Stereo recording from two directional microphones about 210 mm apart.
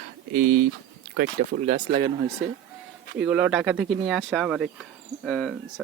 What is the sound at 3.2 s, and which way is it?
Speech, 5° right (ahead or behind).